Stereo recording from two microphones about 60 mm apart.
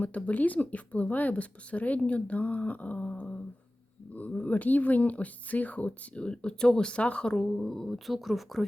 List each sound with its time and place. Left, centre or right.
0.0 s speech: left; by 8.6 s centre